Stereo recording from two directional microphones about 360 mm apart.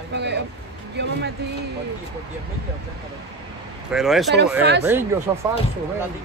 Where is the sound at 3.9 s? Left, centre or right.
Centre.